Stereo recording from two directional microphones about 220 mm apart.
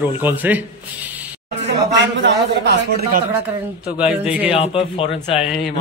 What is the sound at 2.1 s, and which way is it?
A man's voice, 50° right (ahead or behind).